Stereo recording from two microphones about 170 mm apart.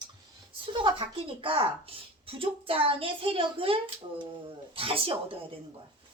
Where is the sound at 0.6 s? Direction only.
30° right (ahead or behind).